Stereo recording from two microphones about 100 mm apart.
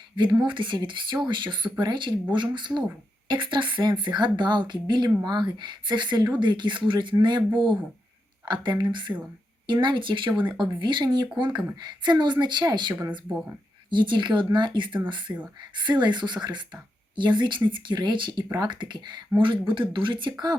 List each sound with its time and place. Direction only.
0.4 s a woman's voice: 55° right (ahead or behind)
13.9 s a woman's voice: 50° right (ahead or behind)